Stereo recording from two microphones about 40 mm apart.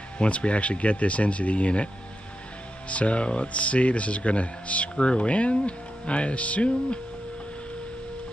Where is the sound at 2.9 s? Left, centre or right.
Left.